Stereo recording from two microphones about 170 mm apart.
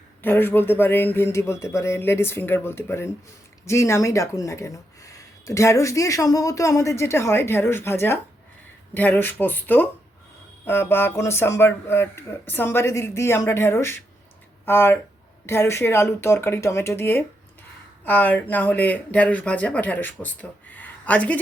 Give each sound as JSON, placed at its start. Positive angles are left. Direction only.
{"t": 0.2, "sound": "speech", "side_deg": 10}